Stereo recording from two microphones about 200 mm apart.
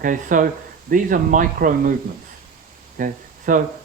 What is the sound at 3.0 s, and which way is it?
Speech, 40° right (ahead or behind).